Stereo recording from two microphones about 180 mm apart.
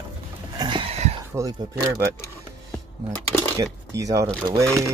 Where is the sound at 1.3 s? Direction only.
20° right (ahead or behind).